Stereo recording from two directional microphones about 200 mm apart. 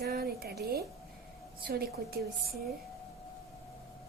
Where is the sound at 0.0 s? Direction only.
50° right (ahead or behind).